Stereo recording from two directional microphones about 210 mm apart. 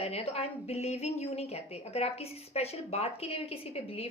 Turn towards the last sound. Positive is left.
turn(degrees=30)  # may be behind; listen again after turning